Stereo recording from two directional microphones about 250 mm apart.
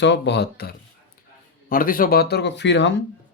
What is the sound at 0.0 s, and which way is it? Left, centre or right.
Speech, left.